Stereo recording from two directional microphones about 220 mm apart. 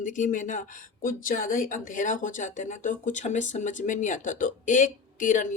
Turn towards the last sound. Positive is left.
turn(degrees=35)  # may be behind; listen again after turning